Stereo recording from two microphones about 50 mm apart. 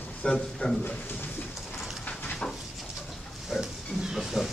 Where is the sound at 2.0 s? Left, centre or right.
Left.